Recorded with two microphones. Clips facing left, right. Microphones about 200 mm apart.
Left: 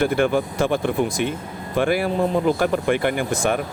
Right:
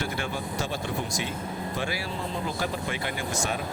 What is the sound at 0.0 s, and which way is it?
Speech, 55° left (ahead or behind).